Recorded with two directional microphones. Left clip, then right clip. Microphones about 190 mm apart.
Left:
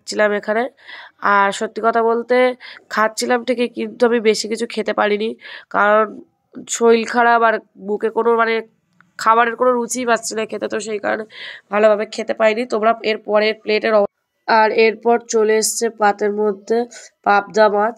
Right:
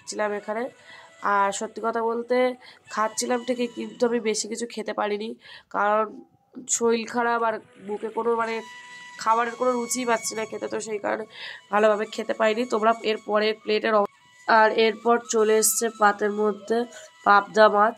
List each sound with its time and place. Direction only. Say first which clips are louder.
0.0 s speech: left 11 dB; 30° left (ahead or behind); by 17.9 s 10° left (ahead or behind)